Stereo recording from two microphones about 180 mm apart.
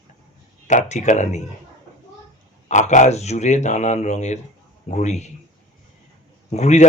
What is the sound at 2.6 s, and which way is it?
Speech, 40° left (ahead or behind).